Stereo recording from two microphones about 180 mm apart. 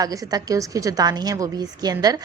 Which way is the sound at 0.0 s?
20° right (ahead or behind).